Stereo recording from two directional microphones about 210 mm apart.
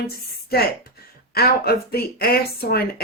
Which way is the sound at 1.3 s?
45° left (ahead or behind).